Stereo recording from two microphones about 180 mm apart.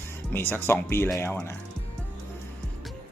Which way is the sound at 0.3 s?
10° left (ahead or behind).